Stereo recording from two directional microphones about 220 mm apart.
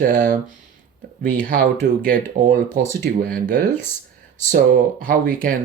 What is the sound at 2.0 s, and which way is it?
Speech, 35° right (ahead or behind).